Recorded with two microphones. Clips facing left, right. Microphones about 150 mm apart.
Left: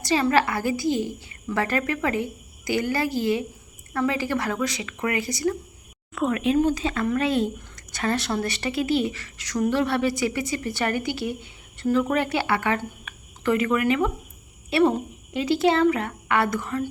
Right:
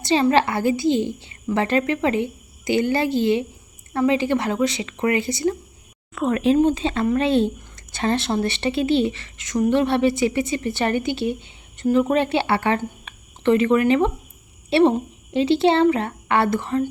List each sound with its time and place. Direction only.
0.0 s a woman's voice: 25° right (ahead or behind)